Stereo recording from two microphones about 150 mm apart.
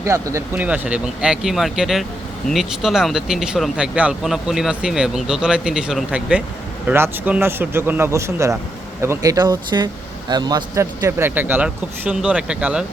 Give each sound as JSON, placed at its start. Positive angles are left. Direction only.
{"t": 0.0, "sound": "speech", "side_deg": -20}